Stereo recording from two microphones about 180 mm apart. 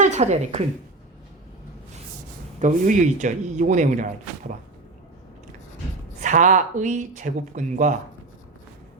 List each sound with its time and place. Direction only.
0.0 s a woman's voice: 40° right (ahead or behind)
2.6 s speech: 40° right (ahead or behind)
6.1 s speech: 45° right (ahead or behind)